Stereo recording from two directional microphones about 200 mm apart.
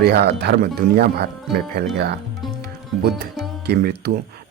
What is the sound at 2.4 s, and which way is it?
Music, centre (ahead or behind).